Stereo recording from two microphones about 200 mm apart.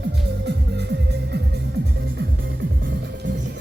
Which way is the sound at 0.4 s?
55° right (ahead or behind).